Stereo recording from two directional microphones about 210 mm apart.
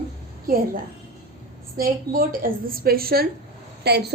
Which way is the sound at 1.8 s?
45° right (ahead or behind).